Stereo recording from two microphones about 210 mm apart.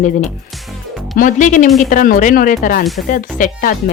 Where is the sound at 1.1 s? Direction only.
40° left (ahead or behind).